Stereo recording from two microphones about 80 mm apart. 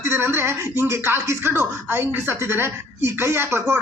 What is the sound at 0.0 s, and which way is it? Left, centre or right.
A man's voice, right.